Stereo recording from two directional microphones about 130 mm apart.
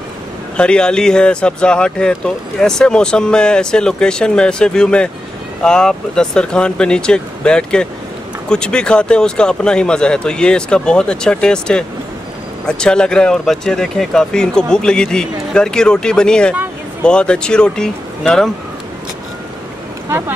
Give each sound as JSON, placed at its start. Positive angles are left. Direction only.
{"t": 0.6, "sound": "speech", "side_deg": 5}
{"t": 20.1, "sound": "speech", "side_deg": -15}